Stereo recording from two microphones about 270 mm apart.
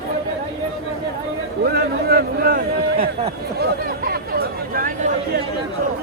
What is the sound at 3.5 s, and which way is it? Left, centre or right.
Chatter, right.